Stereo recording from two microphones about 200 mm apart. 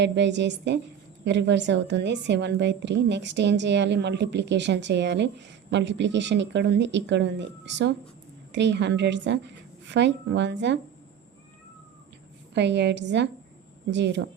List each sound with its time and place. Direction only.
0.0 s a woman's voice: 60° right (ahead or behind)
12.5 s a woman's voice: 60° right (ahead or behind)